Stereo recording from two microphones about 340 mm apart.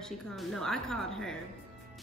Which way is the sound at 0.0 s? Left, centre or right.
Centre.